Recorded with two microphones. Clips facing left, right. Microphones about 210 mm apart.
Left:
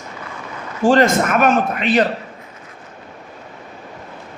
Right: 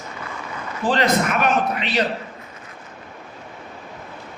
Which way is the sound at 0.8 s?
45° left (ahead or behind).